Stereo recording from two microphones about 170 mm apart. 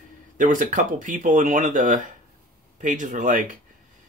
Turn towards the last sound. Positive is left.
turn(degrees=-50)  # may be behind; listen again after turning